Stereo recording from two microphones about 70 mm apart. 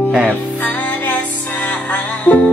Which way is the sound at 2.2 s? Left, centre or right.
Centre.